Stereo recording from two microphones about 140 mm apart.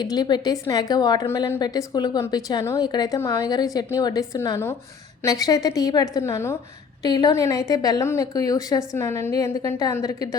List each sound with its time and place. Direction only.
0.0 s a woman's voice: 30° left (ahead or behind)
3.2 s a woman's voice: 15° left (ahead or behind)
3.5 s a woman's voice: 30° left (ahead or behind)
7.0 s a woman's voice: 30° left (ahead or behind)